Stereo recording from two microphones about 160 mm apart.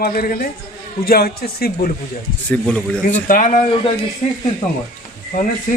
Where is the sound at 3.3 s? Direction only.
55° left (ahead or behind).